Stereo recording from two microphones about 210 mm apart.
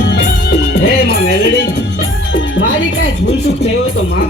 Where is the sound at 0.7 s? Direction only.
45° left (ahead or behind).